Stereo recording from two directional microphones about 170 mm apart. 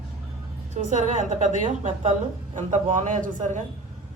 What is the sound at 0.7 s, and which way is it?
A woman's voice, 45° right (ahead or behind).